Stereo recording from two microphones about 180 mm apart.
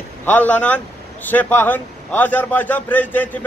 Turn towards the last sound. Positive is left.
turn(degrees=10)  # may be behind; listen again after turning